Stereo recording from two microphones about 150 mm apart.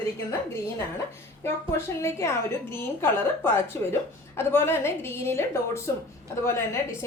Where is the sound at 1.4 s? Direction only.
15° left (ahead or behind).